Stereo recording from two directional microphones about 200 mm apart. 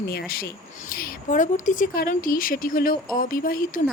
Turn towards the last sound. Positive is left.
turn(degrees=45)  # may be behind; listen again after turning